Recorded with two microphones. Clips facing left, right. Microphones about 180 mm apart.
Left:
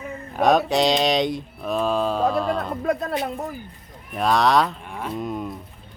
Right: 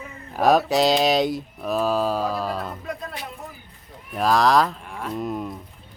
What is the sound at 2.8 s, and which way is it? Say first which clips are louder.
Speech: left 9 dB; 55° left (ahead or behind).